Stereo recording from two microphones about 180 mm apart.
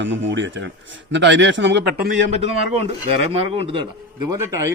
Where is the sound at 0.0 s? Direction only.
90° right.